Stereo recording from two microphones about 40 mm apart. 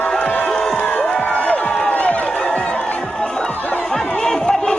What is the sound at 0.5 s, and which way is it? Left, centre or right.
Music, centre.